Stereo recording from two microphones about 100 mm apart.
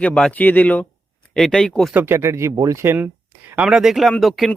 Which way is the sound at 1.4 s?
5° left (ahead or behind).